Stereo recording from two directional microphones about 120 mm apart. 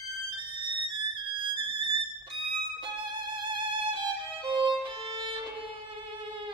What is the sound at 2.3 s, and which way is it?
Violin, 45° right (ahead or behind).